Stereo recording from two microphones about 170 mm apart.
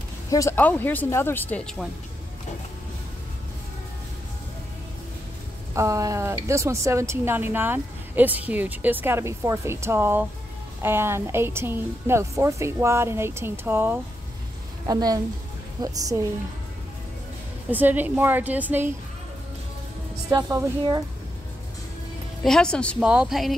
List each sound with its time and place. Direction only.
0.3 s speech: 15° left (ahead or behind)
5.8 s a woman's voice: 20° right (ahead or behind)
17.6 s speech: 10° right (ahead or behind)
20.2 s a woman's voice: 20° right (ahead or behind)
22.4 s speech: 5° left (ahead or behind)
22.9 s speech: 5° right (ahead or behind)